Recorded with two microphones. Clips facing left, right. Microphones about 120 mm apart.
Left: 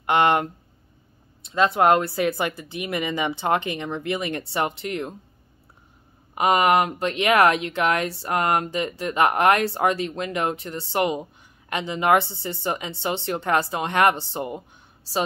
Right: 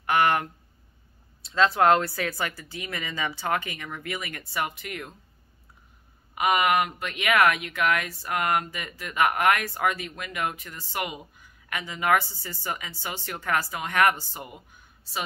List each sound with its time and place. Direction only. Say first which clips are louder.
0.0 s speech: left 4 dB; 20° left (ahead or behind)
6.3 s a woman's voice: left 4 dB; 30° left (ahead or behind)